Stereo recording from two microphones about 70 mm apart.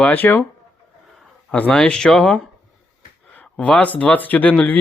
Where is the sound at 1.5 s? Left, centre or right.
Centre.